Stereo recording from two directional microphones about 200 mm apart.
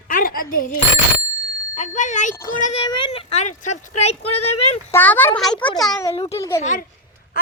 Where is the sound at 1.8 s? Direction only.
35° left (ahead or behind).